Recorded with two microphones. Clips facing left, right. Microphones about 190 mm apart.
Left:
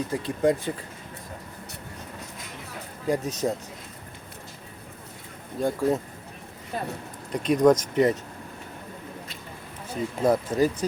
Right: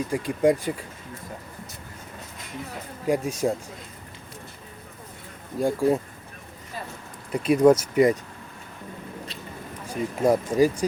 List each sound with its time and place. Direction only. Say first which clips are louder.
0.1 s speech: right 3 dB; 10° right (ahead or behind)
3.1 s speech: right 2 dB; 10° right (ahead or behind)
5.5 s speech: right 2 dB; 10° right (ahead or behind)
6.7 s speech: left 5 dB; 55° left (ahead or behind)
7.3 s speech: right 2 dB; 10° right (ahead or behind)
9.8 s speech: right 1 dB; 10° right (ahead or behind)